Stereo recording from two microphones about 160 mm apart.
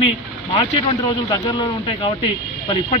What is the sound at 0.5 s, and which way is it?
A man's voice, 25° left (ahead or behind).